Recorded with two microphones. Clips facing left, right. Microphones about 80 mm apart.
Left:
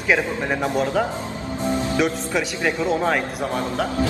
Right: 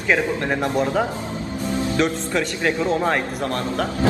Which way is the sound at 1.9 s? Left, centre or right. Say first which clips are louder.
Even; centre.